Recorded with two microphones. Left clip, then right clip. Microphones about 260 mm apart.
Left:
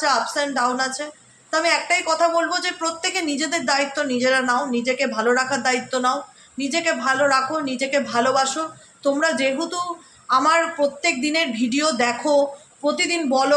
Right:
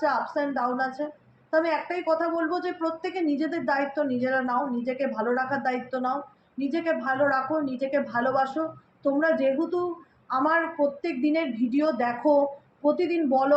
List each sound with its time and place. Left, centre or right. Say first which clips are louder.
0.0 s a woman's voice: left 5 dB; left